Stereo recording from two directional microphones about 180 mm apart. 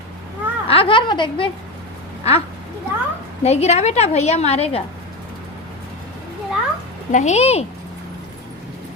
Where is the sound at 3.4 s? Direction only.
35° left (ahead or behind).